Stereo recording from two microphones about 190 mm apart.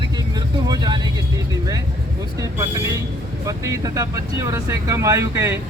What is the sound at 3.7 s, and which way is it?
Speech, 20° right (ahead or behind).